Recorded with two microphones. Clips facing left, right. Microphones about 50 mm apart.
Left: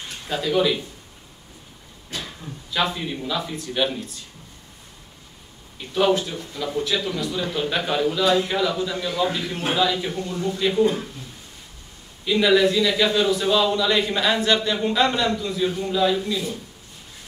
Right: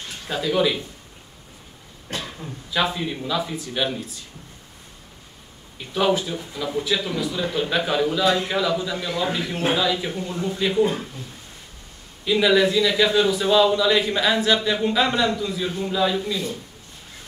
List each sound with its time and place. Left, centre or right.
0.3 s a man's voice: centre
2.1 s a sound: right
2.7 s a man's voice: centre
5.9 s a man's voice: centre
10.2 s a man's voice: centre
12.3 s a man's voice: centre